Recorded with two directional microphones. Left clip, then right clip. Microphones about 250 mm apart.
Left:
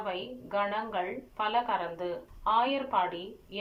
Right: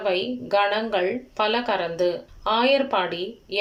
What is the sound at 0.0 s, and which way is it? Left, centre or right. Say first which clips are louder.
A woman's voice: right 12 dB; right.